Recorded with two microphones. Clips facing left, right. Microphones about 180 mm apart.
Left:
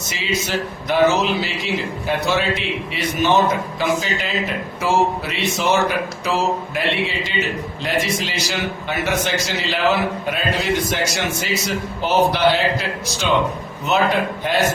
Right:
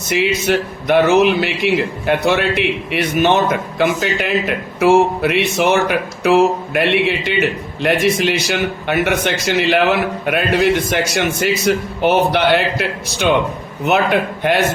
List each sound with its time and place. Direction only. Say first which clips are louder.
0.1 s a man's voice: right 8 dB; 60° right (ahead or behind)